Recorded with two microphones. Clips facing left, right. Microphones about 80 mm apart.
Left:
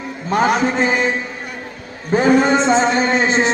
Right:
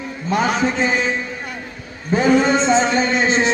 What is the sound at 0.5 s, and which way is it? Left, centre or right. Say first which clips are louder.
Speech: left 2 dB; left.